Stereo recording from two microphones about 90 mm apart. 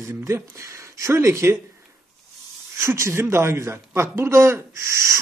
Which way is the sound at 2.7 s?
30° right (ahead or behind).